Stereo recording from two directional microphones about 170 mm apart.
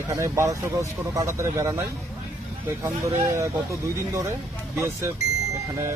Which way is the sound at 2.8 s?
15° right (ahead or behind).